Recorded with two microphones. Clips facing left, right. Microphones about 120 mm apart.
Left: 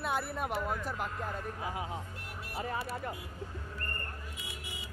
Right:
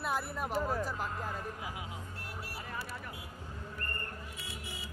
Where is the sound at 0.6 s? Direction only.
35° right (ahead or behind).